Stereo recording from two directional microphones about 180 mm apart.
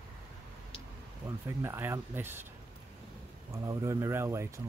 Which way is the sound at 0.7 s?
30° left (ahead or behind).